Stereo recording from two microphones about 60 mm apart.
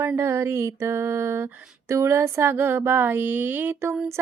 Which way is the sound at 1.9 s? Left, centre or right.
Right.